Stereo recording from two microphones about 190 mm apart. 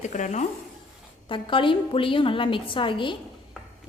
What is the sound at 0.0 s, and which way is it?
Speech, 40° left (ahead or behind).